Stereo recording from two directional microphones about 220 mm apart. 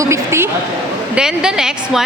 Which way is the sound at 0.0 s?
10° right (ahead or behind).